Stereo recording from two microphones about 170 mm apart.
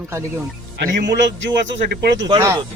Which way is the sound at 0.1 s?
15° right (ahead or behind).